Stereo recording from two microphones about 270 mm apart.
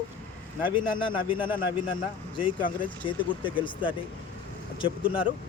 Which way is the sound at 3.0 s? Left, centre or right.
Centre.